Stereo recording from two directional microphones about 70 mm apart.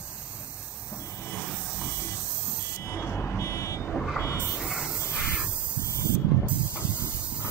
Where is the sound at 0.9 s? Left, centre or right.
Left.